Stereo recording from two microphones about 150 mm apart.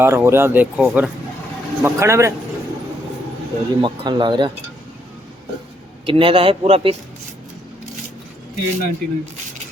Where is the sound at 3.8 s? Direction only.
30° right (ahead or behind).